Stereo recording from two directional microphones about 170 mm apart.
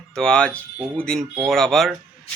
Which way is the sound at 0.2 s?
5° left (ahead or behind).